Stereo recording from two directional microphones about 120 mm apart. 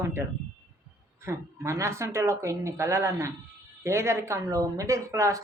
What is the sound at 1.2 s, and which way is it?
A woman's voice, 25° right (ahead or behind).